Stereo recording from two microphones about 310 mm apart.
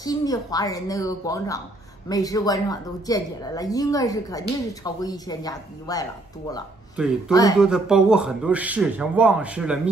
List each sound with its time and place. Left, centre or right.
0.0 s a woman's voice: centre
7.5 s speech: centre